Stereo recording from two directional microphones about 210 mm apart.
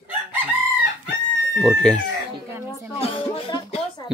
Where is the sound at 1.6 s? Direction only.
5° left (ahead or behind).